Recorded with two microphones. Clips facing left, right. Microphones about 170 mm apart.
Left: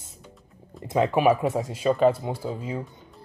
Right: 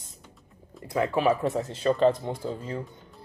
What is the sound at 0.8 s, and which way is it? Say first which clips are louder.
Speech: left 3 dB; 20° left (ahead or behind).